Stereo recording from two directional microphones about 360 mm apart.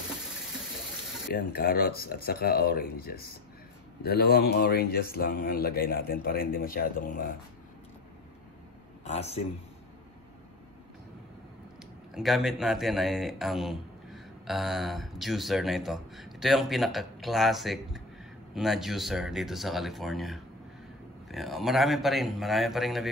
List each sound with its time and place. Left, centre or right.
1.3 s a man's voice: left
9.0 s speech: centre
12.1 s speech: centre